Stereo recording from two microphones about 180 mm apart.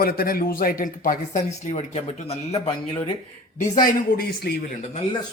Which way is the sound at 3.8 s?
55° left (ahead or behind).